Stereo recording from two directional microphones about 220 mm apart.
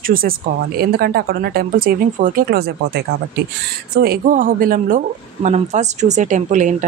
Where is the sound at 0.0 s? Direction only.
40° right (ahead or behind).